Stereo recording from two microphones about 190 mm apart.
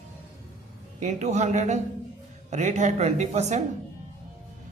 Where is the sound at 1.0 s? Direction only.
40° right (ahead or behind).